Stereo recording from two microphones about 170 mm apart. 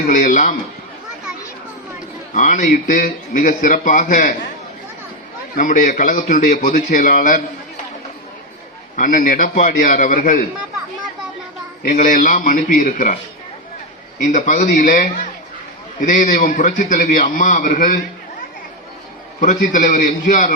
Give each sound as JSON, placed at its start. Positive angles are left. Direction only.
{"t": 0.1, "sound": "a man's voice", "side_deg": 50}
{"t": 2.3, "sound": "a man's voice", "side_deg": 45}
{"t": 5.5, "sound": "a man's voice", "side_deg": 50}
{"t": 9.0, "sound": "a man's voice", "side_deg": 50}
{"t": 11.8, "sound": "a man's voice", "side_deg": 50}
{"t": 14.3, "sound": "a man's voice", "side_deg": 45}
{"t": 19.4, "sound": "a man's voice", "side_deg": 50}